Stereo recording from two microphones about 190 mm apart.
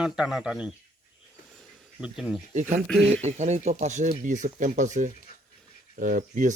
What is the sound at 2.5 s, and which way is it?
Speech, 40° right (ahead or behind).